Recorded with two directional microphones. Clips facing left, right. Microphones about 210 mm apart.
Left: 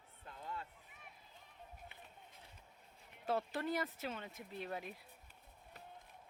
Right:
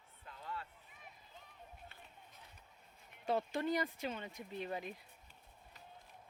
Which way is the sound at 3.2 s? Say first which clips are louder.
Right 2 dB; centre (ahead or behind).